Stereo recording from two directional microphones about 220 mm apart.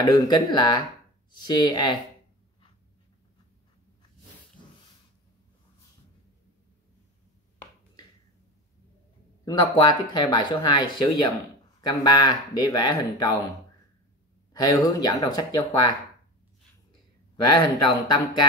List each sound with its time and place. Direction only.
0.0 s speech: 20° left (ahead or behind)
9.4 s speech: 15° left (ahead or behind)
14.5 s speech: 15° left (ahead or behind)
17.6 s speech: 20° left (ahead or behind)